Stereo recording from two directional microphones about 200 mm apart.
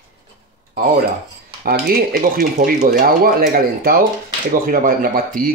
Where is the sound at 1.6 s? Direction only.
50° right (ahead or behind).